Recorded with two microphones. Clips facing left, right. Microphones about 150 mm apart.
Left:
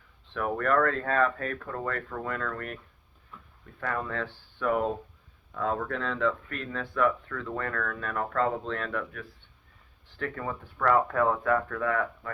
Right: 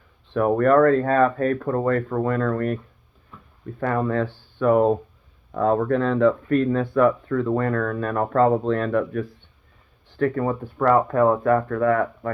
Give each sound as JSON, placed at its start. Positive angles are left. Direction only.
{"t": 0.3, "sound": "speech", "side_deg": -40}